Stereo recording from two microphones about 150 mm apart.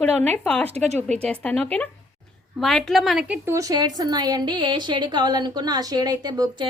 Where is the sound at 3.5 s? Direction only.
20° right (ahead or behind).